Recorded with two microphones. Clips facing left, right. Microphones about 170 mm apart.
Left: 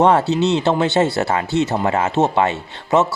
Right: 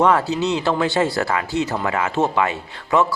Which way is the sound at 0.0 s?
25° left (ahead or behind).